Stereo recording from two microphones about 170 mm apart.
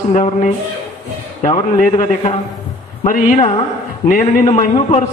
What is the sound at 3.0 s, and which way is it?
A man's voice, 50° left (ahead or behind).